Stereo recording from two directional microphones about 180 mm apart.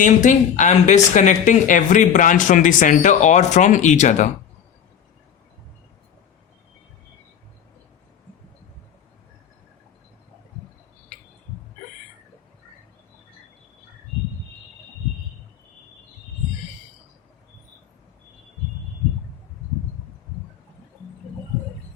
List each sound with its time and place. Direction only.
0.0 s speech: 45° left (ahead or behind)